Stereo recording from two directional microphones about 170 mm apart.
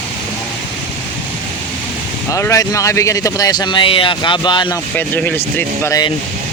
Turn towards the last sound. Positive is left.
turn(degrees=20)  # may be behind; listen again after turning